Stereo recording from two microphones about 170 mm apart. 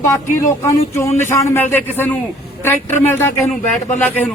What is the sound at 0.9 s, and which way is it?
A man's voice, 15° left (ahead or behind).